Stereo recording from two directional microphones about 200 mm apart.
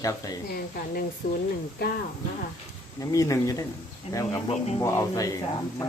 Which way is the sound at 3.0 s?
15° left (ahead or behind).